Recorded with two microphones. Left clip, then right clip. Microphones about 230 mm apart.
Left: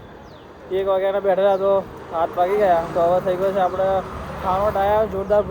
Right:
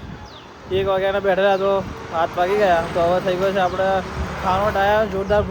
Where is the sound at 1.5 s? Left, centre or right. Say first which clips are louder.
Left 1 dB; right.